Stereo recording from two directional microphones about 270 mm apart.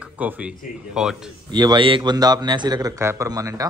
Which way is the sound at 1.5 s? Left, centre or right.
Centre.